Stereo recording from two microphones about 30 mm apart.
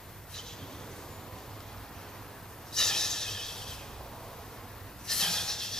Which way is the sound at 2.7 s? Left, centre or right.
Centre.